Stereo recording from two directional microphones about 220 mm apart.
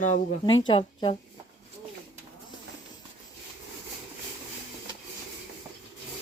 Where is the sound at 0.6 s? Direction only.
20° left (ahead or behind).